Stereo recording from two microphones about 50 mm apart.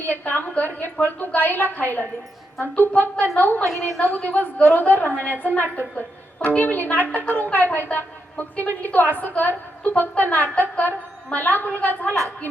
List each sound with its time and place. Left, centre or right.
0.0 s a woman's voice: left
2.9 s a woman's voice: left
3.3 s a woman's voice: left
3.7 s a woman's voice: centre
4.0 s a woman's voice: left
4.5 s a woman's voice: left
4.8 s a woman's voice: left